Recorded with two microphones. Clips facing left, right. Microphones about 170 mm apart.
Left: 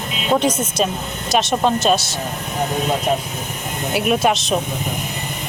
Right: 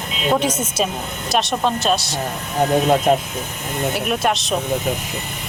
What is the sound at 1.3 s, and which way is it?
Speech, centre (ahead or behind).